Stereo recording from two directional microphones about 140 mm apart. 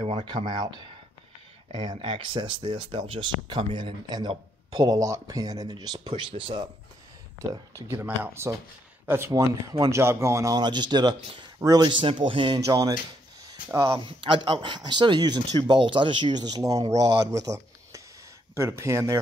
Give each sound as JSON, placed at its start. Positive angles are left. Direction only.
{"t": 0.0, "sound": "speech", "side_deg": -35}
{"t": 7.3, "sound": "speech", "side_deg": -20}
{"t": 12.5, "sound": "speech", "side_deg": -25}
{"t": 13.4, "sound": "a sound", "side_deg": -25}
{"t": 14.0, "sound": "speech", "side_deg": -35}